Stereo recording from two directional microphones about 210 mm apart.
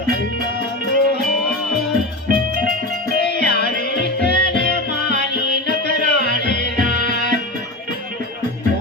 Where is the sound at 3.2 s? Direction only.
50° left (ahead or behind).